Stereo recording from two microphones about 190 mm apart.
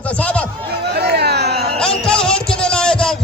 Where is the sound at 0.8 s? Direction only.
60° right (ahead or behind).